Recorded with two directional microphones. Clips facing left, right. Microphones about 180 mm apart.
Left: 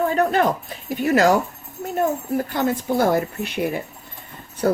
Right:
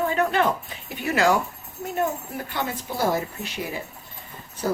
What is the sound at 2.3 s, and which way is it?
Speech, 45° left (ahead or behind).